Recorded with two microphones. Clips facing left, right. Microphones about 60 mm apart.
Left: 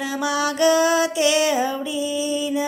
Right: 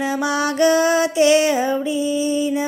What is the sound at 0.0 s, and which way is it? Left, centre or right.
Music, right.